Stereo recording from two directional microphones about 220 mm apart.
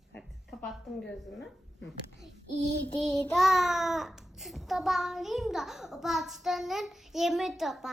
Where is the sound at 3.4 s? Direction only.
Centre (ahead or behind).